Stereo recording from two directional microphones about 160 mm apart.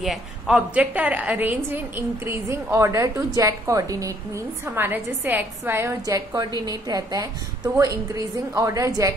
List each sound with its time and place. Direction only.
0.0 s a woman's voice: centre (ahead or behind); by 9.1 s 20° right (ahead or behind)